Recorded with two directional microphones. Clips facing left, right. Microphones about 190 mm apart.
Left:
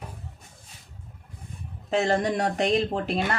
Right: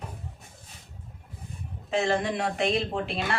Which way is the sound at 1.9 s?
40° left (ahead or behind).